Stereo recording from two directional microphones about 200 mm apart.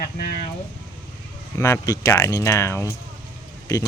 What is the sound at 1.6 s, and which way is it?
Speech, 15° left (ahead or behind).